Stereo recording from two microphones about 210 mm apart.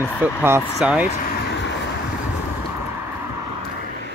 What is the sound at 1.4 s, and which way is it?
Vehicle, 55° left (ahead or behind).